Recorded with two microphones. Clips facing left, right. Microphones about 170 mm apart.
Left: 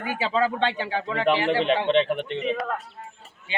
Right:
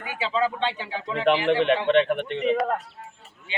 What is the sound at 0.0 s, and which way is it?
Speech, 45° left (ahead or behind).